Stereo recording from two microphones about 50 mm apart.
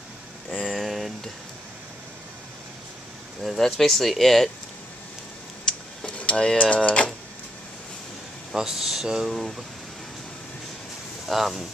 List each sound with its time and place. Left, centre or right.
0.7 s speech: centre
3.4 s speech: centre
5.7 s a sound: centre
6.0 s speech: left
8.5 s speech: centre
11.2 s speech: centre